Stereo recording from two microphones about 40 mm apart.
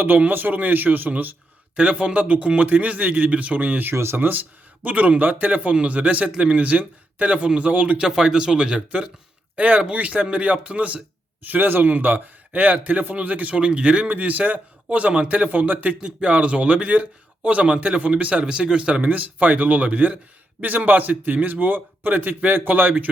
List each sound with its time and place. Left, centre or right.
0.3 s a man's voice: right
1.7 s speech: right
3.8 s speech: right
7.9 s speech: centre
9.6 s speech: right
11.4 s a man's voice: right
14.1 s speech: right
15.3 s speech: right
16.0 s speech: right
19.0 s a man's voice: right